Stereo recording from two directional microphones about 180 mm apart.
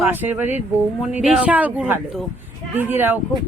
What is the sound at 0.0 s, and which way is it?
Speech, 10° right (ahead or behind).